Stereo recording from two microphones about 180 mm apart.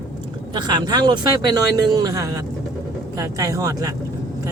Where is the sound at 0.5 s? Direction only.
25° right (ahead or behind).